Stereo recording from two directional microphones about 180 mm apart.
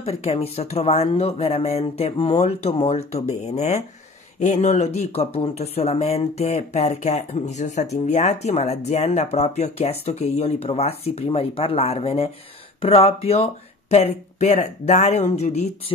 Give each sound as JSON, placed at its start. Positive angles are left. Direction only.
{"t": 0.0, "sound": "speech", "side_deg": 35}